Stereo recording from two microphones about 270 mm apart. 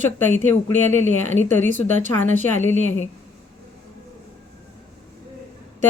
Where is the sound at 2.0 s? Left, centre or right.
Right.